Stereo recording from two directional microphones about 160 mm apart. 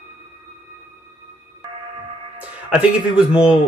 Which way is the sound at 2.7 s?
10° right (ahead or behind).